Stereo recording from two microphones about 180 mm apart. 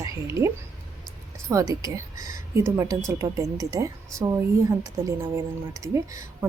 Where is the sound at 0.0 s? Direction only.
15° right (ahead or behind).